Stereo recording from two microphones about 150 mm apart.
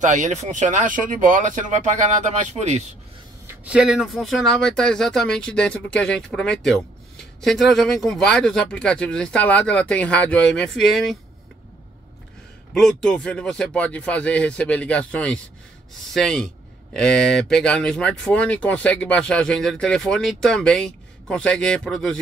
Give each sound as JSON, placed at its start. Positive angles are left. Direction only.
{"t": 0.0, "sound": "speech", "side_deg": -55}
{"t": 3.4, "sound": "speech", "side_deg": -5}
{"t": 12.7, "sound": "speech", "side_deg": 5}